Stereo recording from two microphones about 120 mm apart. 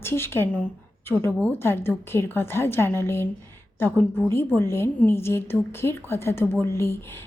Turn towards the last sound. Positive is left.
turn(degrees=25)  # may be behind; listen again after turning